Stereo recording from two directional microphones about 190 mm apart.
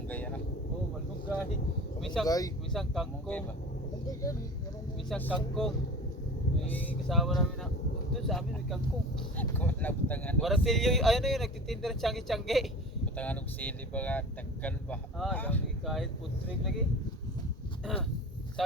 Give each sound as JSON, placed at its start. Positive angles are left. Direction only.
{"t": 0.1, "sound": "vehicle", "side_deg": 10}
{"t": 2.0, "sound": "speech", "side_deg": 0}
{"t": 2.2, "sound": "speech", "side_deg": 20}
{"t": 2.7, "sound": "speech", "side_deg": 0}
{"t": 4.0, "sound": "speech", "side_deg": 20}